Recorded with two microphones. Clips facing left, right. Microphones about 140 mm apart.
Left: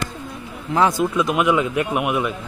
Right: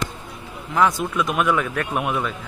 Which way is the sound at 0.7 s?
30° left (ahead or behind).